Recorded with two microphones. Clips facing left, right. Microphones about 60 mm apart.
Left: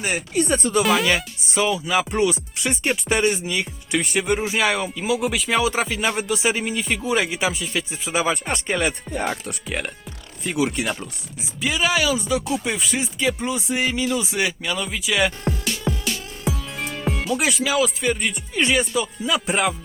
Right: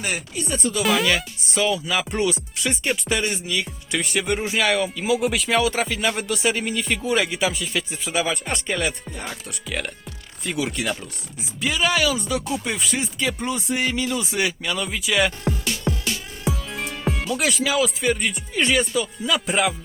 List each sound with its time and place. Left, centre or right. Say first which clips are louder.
0.3 s speech: left 8 dB; left
0.8 s speech: left 1 dB; centre
1.6 s speech: left 2 dB; centre
9.0 s speech: left 8 dB; left
9.7 s speech: right 1 dB; centre
10.8 s speech: even; centre
16.4 s music: right 1 dB; centre
17.3 s speech: left 1 dB; centre